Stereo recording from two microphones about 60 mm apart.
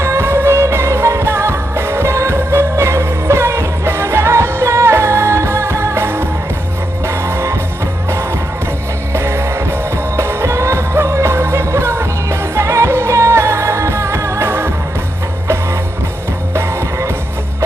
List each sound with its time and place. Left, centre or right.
0.0 s music: right
7.3 s music: right
9.1 s music: right